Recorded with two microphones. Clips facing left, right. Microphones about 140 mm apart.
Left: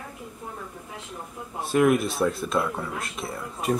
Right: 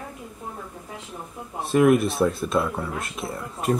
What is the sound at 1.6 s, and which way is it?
Speech, centre (ahead or behind).